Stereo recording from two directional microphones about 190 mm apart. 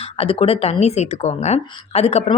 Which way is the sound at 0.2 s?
30° left (ahead or behind).